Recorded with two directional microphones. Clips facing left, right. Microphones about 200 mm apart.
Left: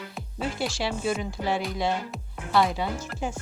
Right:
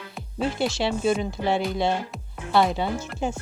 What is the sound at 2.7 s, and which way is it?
Speech, 25° right (ahead or behind).